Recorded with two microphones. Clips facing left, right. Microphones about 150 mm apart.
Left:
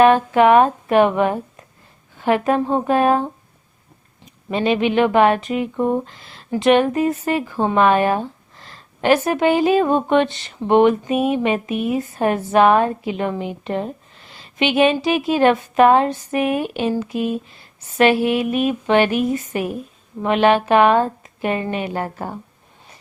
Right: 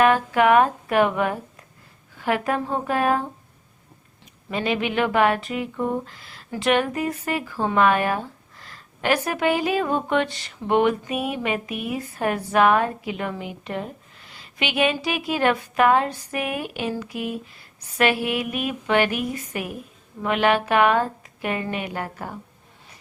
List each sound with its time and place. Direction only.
0.0 s speech: 25° left (ahead or behind)
4.4 s speech: 25° left (ahead or behind)